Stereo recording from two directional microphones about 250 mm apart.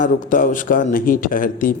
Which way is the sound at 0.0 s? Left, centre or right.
Left.